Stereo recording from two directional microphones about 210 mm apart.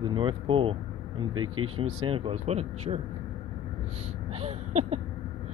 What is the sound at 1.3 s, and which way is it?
Speech, 90° right.